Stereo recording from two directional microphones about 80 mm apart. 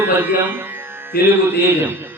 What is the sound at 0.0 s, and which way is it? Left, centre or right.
Music, right.